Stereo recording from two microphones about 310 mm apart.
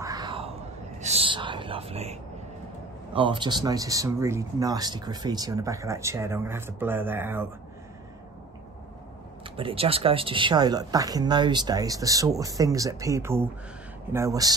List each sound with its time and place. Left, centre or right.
0.0 s a sound: centre
1.0 s whispering: centre
3.1 s speech: centre
9.4 s speech: centre